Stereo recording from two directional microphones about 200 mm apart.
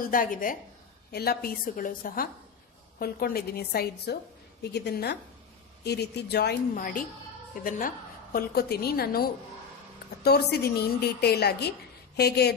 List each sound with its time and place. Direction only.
0.1 s a woman's voice: 45° left (ahead or behind)
10.2 s a woman's voice: 55° left (ahead or behind)